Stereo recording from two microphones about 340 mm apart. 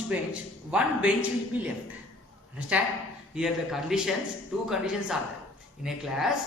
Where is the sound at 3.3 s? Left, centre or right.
Centre.